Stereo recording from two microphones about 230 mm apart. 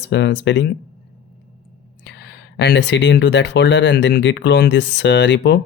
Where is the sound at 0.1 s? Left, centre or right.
Left.